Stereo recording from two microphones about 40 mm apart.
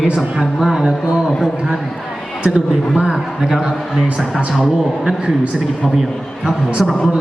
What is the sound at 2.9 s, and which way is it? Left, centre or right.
Speech, right.